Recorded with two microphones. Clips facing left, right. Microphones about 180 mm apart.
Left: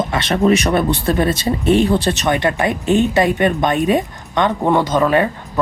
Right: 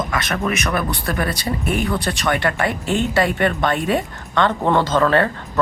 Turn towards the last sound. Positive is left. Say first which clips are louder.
# left 2 dB
turn(degrees=15)  # may be behind; listen again after turning